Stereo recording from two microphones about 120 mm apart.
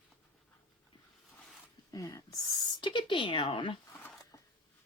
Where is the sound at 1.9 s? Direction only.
30° left (ahead or behind); by 3.8 s 45° left (ahead or behind).